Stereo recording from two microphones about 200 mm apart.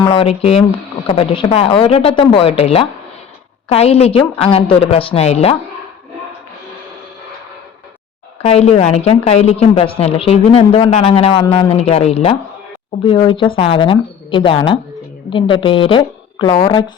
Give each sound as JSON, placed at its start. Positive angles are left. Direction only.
{"t": 0.0, "sound": "a woman's voice", "side_deg": 30}
{"t": 8.4, "sound": "a woman's voice", "side_deg": 30}